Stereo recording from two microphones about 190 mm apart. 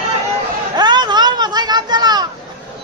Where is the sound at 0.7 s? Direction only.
20° right (ahead or behind).